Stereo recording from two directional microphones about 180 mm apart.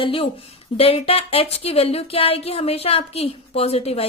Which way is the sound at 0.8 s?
30° left (ahead or behind).